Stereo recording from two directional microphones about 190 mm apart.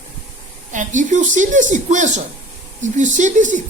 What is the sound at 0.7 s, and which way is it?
Speech, 40° right (ahead or behind).